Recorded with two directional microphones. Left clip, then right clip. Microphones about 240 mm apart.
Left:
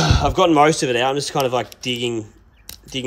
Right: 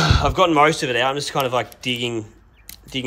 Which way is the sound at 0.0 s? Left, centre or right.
Centre.